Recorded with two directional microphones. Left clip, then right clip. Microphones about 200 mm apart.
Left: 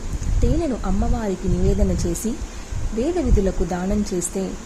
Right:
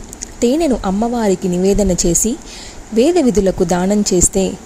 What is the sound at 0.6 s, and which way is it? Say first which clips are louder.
Speech: right 9 dB; 30° right (ahead or behind).